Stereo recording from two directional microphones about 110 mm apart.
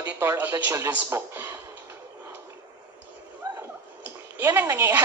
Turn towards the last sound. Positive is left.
turn(degrees=-15)  # may be behind; listen again after turning